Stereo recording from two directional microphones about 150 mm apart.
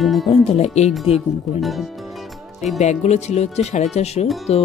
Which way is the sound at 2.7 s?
50° left (ahead or behind).